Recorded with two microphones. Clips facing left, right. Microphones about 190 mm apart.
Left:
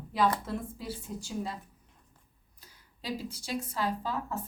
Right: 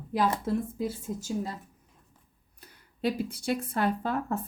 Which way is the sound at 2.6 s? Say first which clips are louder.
Right 16 dB; 60° right (ahead or behind).